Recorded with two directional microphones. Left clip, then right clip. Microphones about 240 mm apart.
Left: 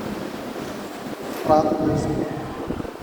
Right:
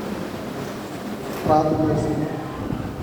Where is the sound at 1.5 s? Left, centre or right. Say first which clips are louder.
Left 1 dB; left.